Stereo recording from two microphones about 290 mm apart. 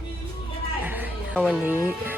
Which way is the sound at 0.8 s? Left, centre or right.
Centre.